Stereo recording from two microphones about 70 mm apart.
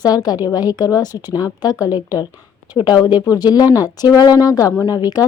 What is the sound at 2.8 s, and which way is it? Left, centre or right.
Speech, left.